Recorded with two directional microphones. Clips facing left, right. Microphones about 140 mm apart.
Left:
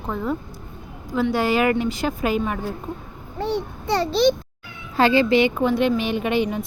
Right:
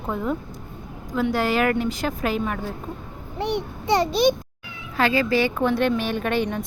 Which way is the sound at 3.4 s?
20° right (ahead or behind).